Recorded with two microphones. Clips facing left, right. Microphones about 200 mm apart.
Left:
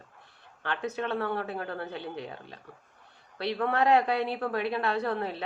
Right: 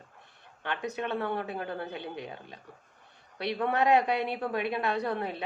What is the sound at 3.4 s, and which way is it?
Speech, 20° right (ahead or behind).